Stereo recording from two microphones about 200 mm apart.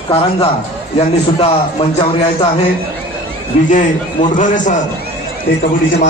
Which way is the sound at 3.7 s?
40° left (ahead or behind).